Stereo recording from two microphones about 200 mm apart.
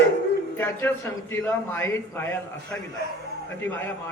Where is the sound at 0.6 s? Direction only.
10° left (ahead or behind).